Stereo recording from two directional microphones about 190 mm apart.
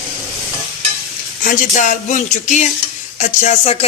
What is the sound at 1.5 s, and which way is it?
Speech, 40° left (ahead or behind).